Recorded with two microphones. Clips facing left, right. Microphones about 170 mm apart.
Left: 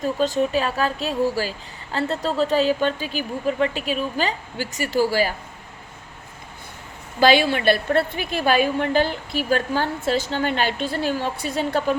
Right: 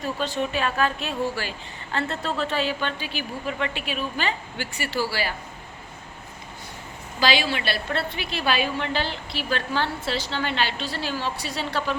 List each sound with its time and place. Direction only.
0.0 s a woman's voice: 40° left (ahead or behind)
7.2 s a woman's voice: 55° left (ahead or behind)